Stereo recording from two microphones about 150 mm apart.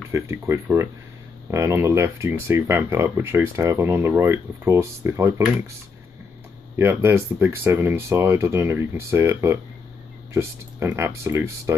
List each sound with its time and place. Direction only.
0.1 s speech: 20° right (ahead or behind)
6.8 s speech: 15° right (ahead or behind)